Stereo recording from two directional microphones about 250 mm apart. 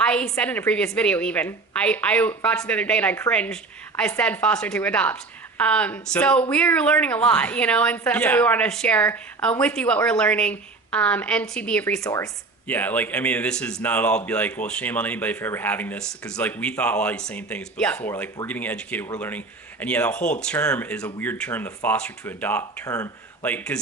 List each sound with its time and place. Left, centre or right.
0.0 s a woman's voice: centre
20.1 s speech: left
20.4 s speech: centre